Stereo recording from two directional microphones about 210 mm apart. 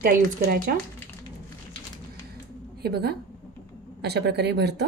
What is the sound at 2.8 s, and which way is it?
A woman's voice, 50° right (ahead or behind).